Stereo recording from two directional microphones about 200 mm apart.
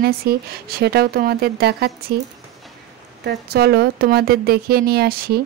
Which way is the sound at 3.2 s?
55° right (ahead or behind).